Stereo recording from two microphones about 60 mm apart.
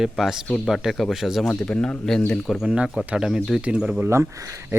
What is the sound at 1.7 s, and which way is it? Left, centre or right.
Speech, centre.